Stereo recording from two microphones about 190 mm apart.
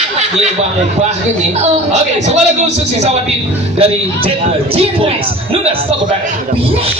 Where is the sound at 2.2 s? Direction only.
35° right (ahead or behind).